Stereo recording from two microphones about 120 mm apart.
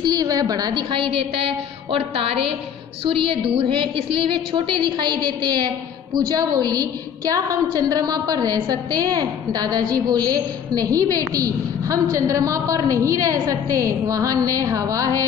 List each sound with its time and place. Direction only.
0.0 s a woman's voice: 35° right (ahead or behind)